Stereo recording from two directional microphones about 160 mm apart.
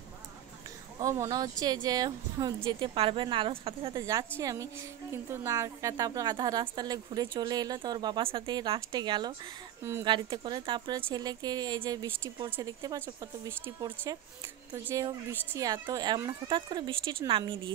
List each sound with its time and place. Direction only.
1.0 s a woman's voice: 20° right (ahead or behind)
4.0 s a woman's voice: 20° right (ahead or behind)